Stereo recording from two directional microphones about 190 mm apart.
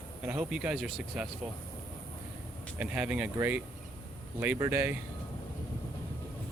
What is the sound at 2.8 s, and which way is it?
Speech, 5° right (ahead or behind).